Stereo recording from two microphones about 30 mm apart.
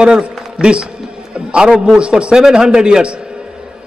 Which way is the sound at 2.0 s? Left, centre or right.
Right.